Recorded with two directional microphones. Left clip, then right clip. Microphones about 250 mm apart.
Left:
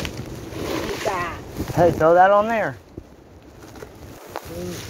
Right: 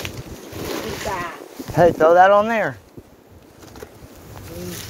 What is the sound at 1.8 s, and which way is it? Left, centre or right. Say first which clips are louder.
Speech: right 2 dB; right.